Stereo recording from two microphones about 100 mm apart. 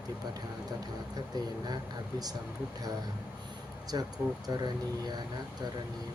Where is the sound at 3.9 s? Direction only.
40° right (ahead or behind).